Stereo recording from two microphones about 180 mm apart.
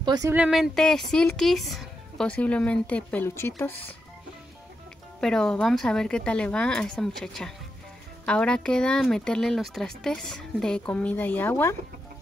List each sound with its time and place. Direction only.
0.0 s speech: 20° right (ahead or behind)
0.3 s speech: 5° right (ahead or behind); by 3.9 s 10° left (ahead or behind)
5.2 s speech: 5° left (ahead or behind)